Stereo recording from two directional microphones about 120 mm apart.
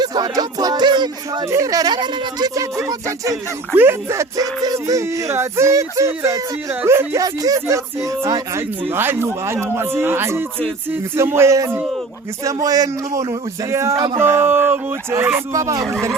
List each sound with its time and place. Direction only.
0.0 s music: 35° right (ahead or behind)
1.5 s speech: 25° right (ahead or behind)
15.5 s speech: 30° right (ahead or behind)